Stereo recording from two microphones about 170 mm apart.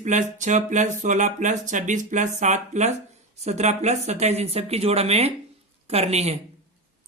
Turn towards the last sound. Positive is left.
turn(degrees=-40)  # may be behind; listen again after turning